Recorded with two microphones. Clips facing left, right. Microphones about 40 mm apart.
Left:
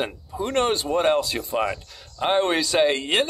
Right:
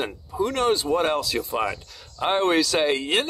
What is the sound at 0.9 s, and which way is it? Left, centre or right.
Speech, centre.